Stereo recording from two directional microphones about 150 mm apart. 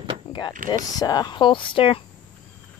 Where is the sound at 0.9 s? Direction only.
25° left (ahead or behind).